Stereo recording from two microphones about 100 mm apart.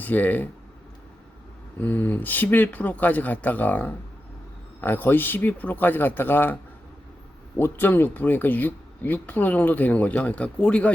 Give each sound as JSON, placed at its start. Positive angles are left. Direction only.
{"t": 0.0, "sound": "speech", "side_deg": 15}
{"t": 1.8, "sound": "speech", "side_deg": 20}